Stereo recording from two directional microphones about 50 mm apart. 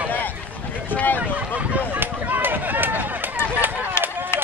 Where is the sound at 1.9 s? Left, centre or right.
Right.